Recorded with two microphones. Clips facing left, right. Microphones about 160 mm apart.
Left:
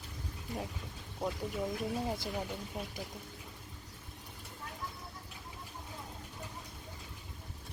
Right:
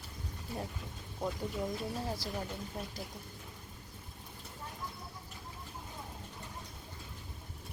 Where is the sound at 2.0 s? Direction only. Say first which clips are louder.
Left 2 dB; 20° left (ahead or behind).